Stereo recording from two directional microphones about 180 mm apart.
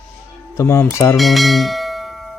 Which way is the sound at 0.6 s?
15° left (ahead or behind).